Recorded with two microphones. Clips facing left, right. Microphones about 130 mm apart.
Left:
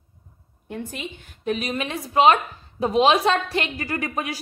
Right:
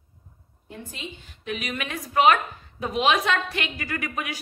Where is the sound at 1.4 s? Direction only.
35° left (ahead or behind).